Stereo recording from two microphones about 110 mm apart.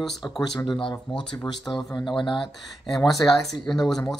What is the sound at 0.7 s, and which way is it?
Speech, 45° left (ahead or behind).